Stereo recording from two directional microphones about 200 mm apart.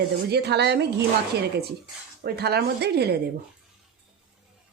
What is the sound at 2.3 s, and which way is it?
Speech, 55° right (ahead or behind).